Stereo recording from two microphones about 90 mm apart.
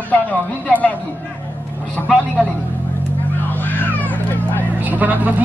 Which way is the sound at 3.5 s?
20° left (ahead or behind).